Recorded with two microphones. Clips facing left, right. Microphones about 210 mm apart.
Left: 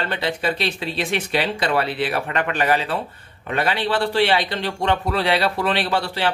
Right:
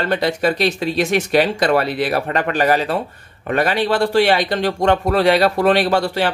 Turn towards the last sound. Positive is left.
turn(degrees=-45)  # may be behind; listen again after turning